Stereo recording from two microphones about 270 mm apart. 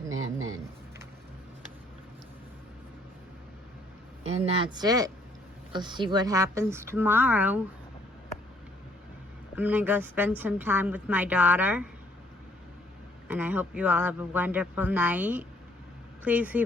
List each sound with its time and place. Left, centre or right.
4.2 s a woman's voice: right; by 7.6 s centre
9.6 s a woman's voice: centre
13.2 s speech: centre